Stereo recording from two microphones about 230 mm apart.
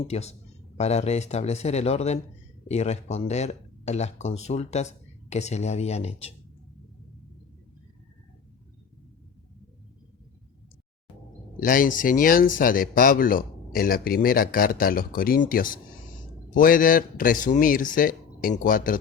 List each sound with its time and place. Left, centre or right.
0.1 s speech: left
11.6 s speech: left